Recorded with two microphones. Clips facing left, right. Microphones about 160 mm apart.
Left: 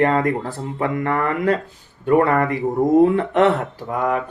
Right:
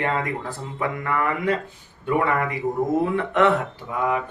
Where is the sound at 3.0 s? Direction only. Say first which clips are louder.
Left 5 dB; 30° left (ahead or behind).